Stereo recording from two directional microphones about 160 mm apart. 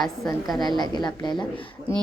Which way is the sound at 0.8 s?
25° left (ahead or behind).